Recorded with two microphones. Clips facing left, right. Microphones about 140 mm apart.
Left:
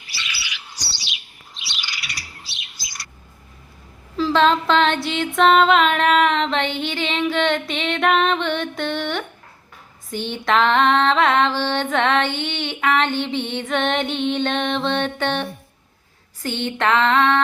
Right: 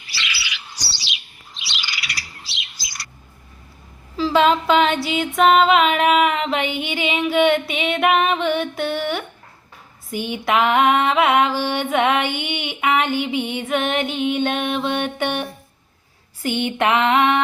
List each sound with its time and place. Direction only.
0.1 s bird: 85° right
4.2 s a sound: 5° right (ahead or behind)
5.0 s mantra: 5° right (ahead or behind)